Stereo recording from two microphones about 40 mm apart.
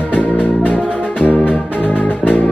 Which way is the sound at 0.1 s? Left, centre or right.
Left.